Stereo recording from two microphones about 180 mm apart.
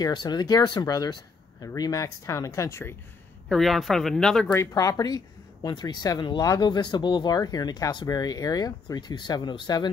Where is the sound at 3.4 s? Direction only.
Centre (ahead or behind).